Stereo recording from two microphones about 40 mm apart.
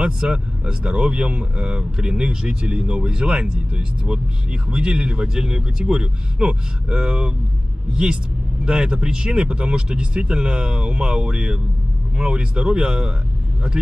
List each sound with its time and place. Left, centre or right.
0.0 s speech: right